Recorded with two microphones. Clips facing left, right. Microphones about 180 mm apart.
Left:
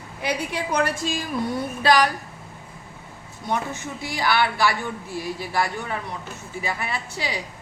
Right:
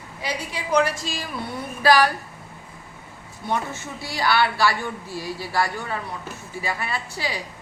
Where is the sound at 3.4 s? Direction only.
15° left (ahead or behind).